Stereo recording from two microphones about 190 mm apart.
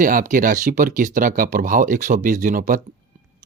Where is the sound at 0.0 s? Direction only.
45° right (ahead or behind).